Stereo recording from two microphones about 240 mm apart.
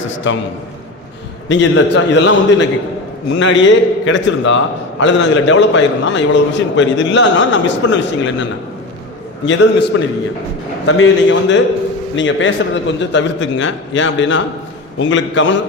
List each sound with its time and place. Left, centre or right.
0.1 s a sound: left
1.5 s a man's voice: left
9.5 s a man's voice: left